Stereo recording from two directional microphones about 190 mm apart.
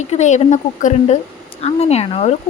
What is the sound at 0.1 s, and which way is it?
Speech, 35° left (ahead or behind).